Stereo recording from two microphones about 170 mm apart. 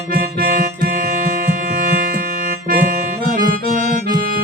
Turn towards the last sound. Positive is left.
turn(degrees=-55)  # may be behind; listen again after turning